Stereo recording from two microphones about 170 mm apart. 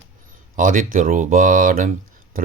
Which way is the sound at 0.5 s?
55° right (ahead or behind).